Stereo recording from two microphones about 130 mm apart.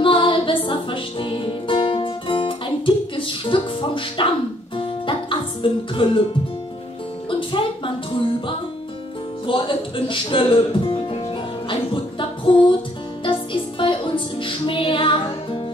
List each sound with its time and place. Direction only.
0.0 s music: 40° left (ahead or behind)
7.2 s speech: 40° left (ahead or behind)
11.7 s music: 40° left (ahead or behind)